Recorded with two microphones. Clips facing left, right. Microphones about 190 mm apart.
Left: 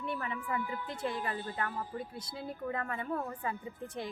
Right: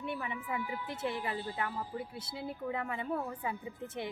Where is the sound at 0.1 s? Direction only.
20° right (ahead or behind).